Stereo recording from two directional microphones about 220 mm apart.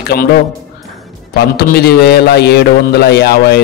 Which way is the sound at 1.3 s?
45° left (ahead or behind).